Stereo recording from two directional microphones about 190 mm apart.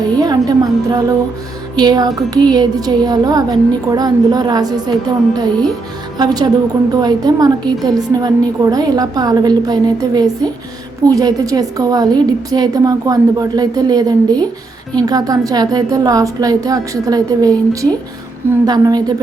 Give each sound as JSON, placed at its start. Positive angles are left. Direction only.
{"t": 0.0, "sound": "music", "side_deg": -20}
{"t": 1.7, "sound": "speech", "side_deg": -20}